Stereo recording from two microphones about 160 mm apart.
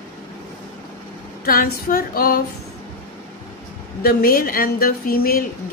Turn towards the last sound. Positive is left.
turn(degrees=70)  # may be behind; listen again after turning